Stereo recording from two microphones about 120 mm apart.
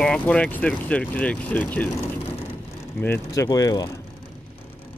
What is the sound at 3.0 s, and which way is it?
Speech, 20° left (ahead or behind).